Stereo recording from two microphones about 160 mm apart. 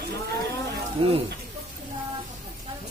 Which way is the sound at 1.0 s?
40° right (ahead or behind).